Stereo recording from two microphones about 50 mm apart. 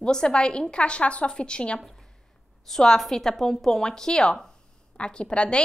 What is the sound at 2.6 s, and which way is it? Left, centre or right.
A woman's voice, centre.